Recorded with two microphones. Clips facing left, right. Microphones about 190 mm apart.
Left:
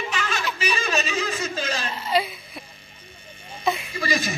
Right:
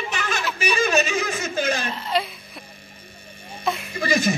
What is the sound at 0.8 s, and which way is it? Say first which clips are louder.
Snicker: right 5 dB; 45° right (ahead or behind).